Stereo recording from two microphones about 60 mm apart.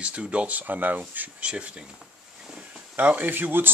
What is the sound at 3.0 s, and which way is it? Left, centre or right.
Speech, right.